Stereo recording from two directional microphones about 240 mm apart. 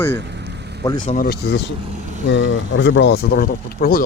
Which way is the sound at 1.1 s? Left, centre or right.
Left.